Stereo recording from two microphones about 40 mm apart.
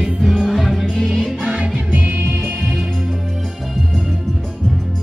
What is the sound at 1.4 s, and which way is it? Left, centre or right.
Music, right.